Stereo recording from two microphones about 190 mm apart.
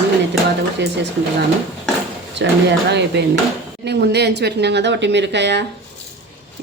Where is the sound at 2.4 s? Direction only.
65° right (ahead or behind).